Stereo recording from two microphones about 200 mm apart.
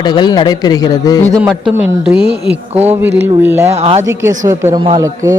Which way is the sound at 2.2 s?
55° right (ahead or behind).